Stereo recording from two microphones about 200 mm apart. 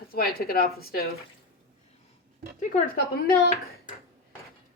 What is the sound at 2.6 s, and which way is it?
Speech, 45° left (ahead or behind).